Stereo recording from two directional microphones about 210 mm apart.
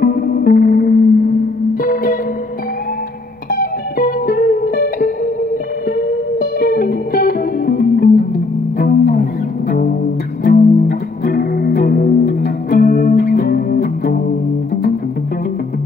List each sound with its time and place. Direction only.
0.0 s music: 45° left (ahead or behind)
3.5 s music: 45° left (ahead or behind)
6.4 s music: 45° left (ahead or behind)